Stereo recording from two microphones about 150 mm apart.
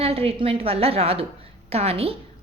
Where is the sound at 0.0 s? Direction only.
40° right (ahead or behind).